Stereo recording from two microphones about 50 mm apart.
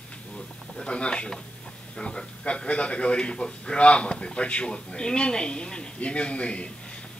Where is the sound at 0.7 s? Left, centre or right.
Left.